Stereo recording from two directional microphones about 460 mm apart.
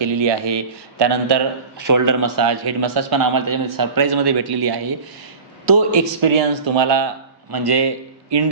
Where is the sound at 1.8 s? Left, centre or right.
Right.